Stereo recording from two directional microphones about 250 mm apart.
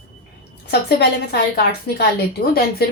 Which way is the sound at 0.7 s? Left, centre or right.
Left.